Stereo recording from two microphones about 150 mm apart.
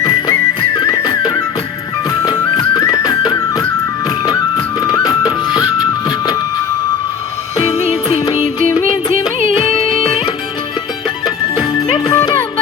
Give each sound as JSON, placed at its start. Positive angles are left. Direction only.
{"t": 0.0, "sound": "music", "side_deg": 30}
{"t": 7.7, "sound": "music", "side_deg": 40}
{"t": 10.0, "sound": "music", "side_deg": 40}
{"t": 11.5, "sound": "music", "side_deg": 35}